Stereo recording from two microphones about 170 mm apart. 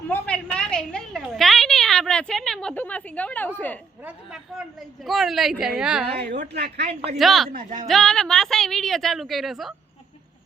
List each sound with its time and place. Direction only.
0.1 s a sound: 5° left (ahead or behind)
4.0 s a woman's voice: 5° right (ahead or behind)
6.5 s speech: 75° right (ahead or behind)
7.2 s a woman's voice: centre (ahead or behind)
7.5 s speech: 50° right (ahead or behind)
7.9 s a woman's voice: centre (ahead or behind)